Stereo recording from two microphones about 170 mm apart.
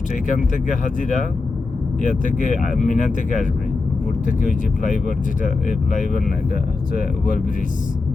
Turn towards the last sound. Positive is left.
turn(degrees=55)  # may be behind; listen again after turning